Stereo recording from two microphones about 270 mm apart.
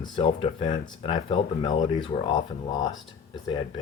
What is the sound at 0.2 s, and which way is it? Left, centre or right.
Speech, left.